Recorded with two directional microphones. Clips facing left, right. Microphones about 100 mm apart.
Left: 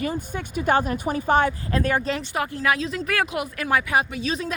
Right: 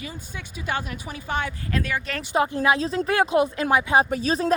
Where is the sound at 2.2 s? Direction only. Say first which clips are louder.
Right 3 dB; 20° right (ahead or behind).